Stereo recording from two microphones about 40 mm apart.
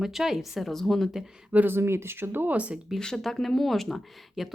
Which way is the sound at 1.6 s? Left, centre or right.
Right.